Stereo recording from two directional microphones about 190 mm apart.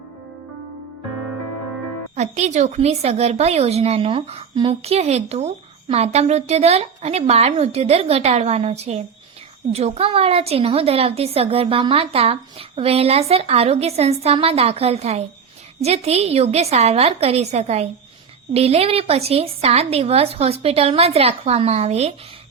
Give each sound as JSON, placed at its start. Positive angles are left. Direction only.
{"t": 2.1, "sound": "a woman's voice", "side_deg": -35}